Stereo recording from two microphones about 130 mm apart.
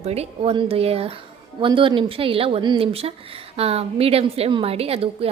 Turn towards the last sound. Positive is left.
turn(degrees=-45)  # may be behind; listen again after turning